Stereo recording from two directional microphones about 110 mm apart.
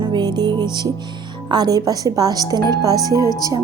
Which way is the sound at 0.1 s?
40° right (ahead or behind).